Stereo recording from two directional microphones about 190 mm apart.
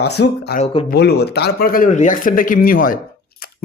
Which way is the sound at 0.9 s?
60° left (ahead or behind).